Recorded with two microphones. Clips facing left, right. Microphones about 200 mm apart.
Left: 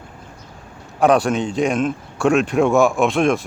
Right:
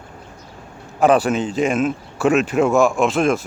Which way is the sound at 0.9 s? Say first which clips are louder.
Even; centre (ahead or behind).